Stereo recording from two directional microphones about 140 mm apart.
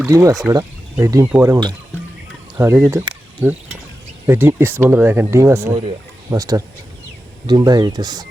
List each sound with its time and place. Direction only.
0.0 s speech: 20° right (ahead or behind)
2.6 s speech: 15° right (ahead or behind)